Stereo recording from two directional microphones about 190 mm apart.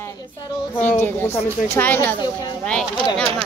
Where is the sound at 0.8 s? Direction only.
10° left (ahead or behind).